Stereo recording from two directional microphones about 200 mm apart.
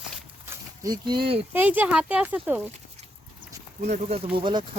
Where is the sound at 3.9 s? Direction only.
35° right (ahead or behind).